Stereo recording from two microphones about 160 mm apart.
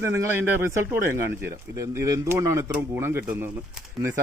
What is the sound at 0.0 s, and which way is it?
Speech, 15° right (ahead or behind).